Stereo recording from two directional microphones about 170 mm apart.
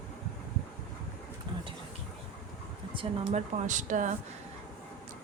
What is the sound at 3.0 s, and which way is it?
A woman's voice, 40° right (ahead or behind).